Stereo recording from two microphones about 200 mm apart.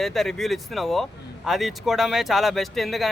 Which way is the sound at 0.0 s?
Centre (ahead or behind).